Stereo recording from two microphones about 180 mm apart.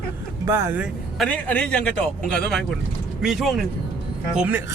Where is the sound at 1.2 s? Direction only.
10° left (ahead or behind).